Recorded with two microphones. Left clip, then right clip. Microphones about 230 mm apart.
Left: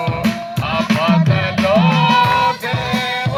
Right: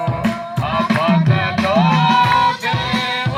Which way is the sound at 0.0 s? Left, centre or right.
Left.